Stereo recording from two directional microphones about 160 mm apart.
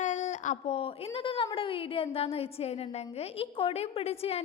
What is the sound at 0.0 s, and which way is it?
A woman's voice, 50° left (ahead or behind).